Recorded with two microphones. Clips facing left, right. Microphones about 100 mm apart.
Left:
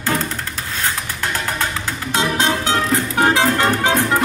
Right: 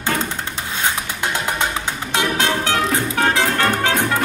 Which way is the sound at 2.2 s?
20° left (ahead or behind).